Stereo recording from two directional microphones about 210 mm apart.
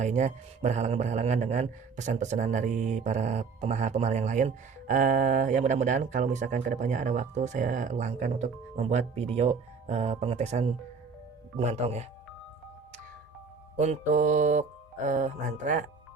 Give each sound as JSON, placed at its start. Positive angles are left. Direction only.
{"t": 0.0, "sound": "a man's voice", "side_deg": -35}
{"t": 13.7, "sound": "a man's voice", "side_deg": -35}